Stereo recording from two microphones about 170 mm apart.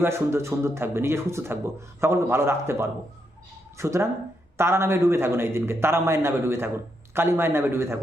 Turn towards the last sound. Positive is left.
turn(degrees=-15)  # may be behind; listen again after turning